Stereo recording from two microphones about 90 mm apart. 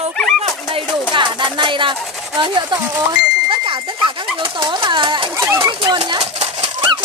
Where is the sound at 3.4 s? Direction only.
65° right (ahead or behind).